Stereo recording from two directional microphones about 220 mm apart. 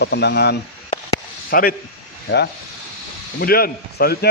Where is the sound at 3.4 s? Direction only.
45° left (ahead or behind).